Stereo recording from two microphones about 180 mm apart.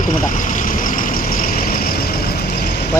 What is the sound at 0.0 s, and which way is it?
Vehicle, 45° left (ahead or behind).